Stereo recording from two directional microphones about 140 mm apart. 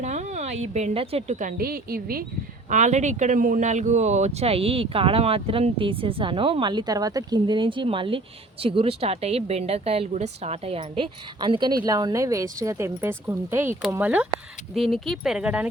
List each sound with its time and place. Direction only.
0.0 s a woman's voice: 55° right (ahead or behind)
1.4 s speech: 80° right
2.6 s a woman's voice: 60° right (ahead or behind)
10.8 s speech: 35° right (ahead or behind); by 14.3 s 10° right (ahead or behind)
14.9 s speech: centre (ahead or behind)